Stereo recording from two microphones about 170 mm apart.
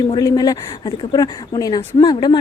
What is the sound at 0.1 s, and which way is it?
Speech, 20° left (ahead or behind).